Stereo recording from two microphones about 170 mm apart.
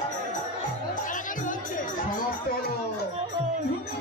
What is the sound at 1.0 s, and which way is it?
Music, 50° left (ahead or behind).